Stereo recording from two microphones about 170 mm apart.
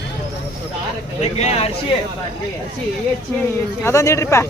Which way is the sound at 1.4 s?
40° left (ahead or behind).